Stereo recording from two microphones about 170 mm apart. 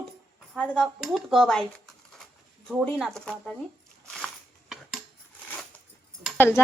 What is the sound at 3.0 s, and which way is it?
Speech, centre (ahead or behind).